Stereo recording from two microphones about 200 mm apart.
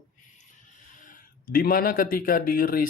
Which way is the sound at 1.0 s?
45° left (ahead or behind).